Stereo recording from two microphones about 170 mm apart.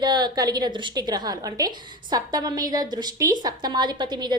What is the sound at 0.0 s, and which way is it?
A woman's voice, 25° right (ahead or behind).